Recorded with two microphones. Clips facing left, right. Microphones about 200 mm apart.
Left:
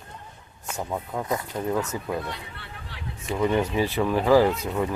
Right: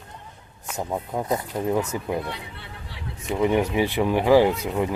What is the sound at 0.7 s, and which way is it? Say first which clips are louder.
Speech: right 2 dB; 15° right (ahead or behind).